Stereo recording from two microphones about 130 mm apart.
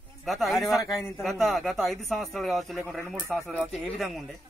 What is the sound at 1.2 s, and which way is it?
Speech, centre (ahead or behind).